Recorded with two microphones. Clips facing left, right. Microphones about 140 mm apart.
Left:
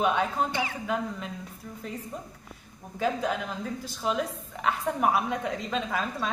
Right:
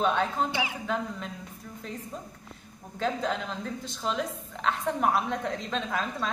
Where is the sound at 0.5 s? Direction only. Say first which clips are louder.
Even; 10° right (ahead or behind).